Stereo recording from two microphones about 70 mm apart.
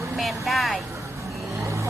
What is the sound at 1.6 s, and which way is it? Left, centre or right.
Vehicle, right.